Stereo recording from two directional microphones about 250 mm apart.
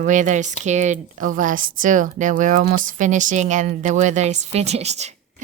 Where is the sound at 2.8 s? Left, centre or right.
Right.